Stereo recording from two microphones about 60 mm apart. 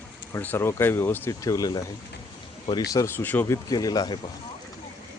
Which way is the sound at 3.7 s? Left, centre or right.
Left.